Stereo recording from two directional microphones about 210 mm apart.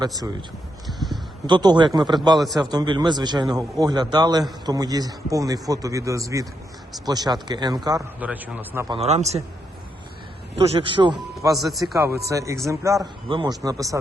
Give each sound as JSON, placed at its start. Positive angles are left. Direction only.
{"t": 0.9, "sound": "speech", "side_deg": 0}
{"t": 1.5, "sound": "speech", "side_deg": -20}
{"t": 2.4, "sound": "a man's voice", "side_deg": 0}
{"t": 2.6, "sound": "speech", "side_deg": -20}
{"t": 8.2, "sound": "speech", "side_deg": -5}
{"t": 8.9, "sound": "speech", "side_deg": -30}
{"t": 10.6, "sound": "speech", "side_deg": -25}
{"t": 11.7, "sound": "a man's voice", "side_deg": 0}
{"t": 12.3, "sound": "speech", "side_deg": -15}